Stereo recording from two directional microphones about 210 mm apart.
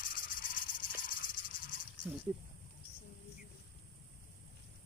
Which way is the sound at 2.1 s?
10° right (ahead or behind).